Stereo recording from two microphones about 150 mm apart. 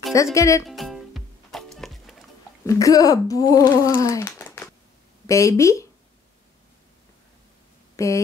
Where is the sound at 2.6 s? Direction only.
20° left (ahead or behind).